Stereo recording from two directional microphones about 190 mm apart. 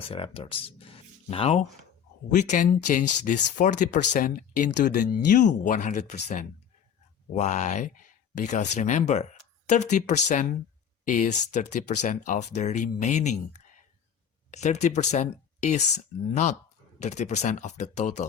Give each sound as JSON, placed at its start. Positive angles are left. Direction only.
{"t": 0.1, "sound": "speech", "side_deg": 30}
{"t": 7.3, "sound": "speech", "side_deg": 40}
{"t": 14.5, "sound": "speech", "side_deg": 35}